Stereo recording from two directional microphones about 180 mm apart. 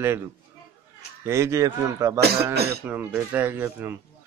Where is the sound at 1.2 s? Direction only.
15° right (ahead or behind).